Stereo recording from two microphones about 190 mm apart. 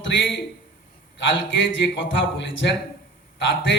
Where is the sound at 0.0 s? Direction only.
75° left (ahead or behind).